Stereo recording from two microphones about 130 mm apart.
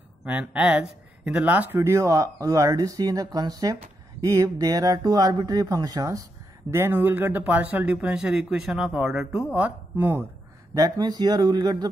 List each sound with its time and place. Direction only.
0.2 s speech: 10° right (ahead or behind)
10.7 s speech: 30° right (ahead or behind)